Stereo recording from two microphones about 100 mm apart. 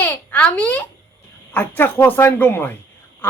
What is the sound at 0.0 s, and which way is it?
A child's voice, 15° left (ahead or behind).